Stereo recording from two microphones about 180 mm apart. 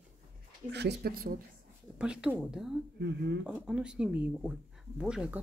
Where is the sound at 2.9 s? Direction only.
75° right (ahead or behind).